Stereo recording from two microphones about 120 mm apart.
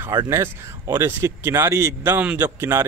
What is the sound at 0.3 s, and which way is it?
Speech, 25° right (ahead or behind).